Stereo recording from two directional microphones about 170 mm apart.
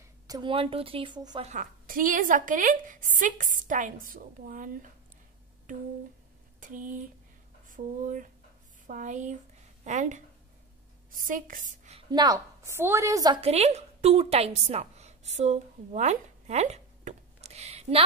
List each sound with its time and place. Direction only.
0.3 s a woman's voice: 30° right (ahead or behind)
1.4 s a woman's voice: 45° right (ahead or behind)
6.6 s a woman's voice: 50° right (ahead or behind)
12.1 s a woman's voice: 25° right (ahead or behind)
13.4 s a woman's voice: 40° right (ahead or behind)